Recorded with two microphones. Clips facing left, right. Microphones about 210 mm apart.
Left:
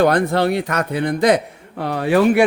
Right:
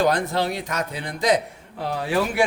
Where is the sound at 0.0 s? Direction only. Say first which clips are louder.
Left 6 dB; 60° left (ahead or behind).